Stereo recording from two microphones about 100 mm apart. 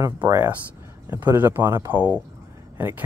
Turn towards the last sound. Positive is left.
turn(degrees=-20)  # may be behind; listen again after turning